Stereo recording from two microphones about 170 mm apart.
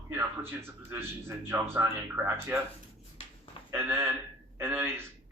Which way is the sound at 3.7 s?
15° right (ahead or behind).